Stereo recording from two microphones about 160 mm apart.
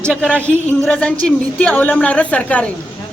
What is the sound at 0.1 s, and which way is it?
A man's voice, 5° left (ahead or behind).